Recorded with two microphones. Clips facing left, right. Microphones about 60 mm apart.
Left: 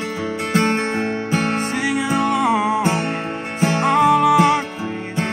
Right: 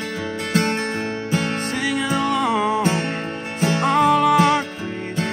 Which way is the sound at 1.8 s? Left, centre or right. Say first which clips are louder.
Left 1 dB; centre.